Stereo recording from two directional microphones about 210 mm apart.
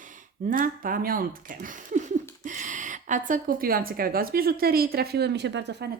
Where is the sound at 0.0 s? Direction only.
35° right (ahead or behind).